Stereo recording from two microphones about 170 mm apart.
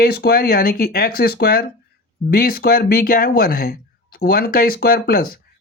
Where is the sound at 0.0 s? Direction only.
65° left (ahead or behind).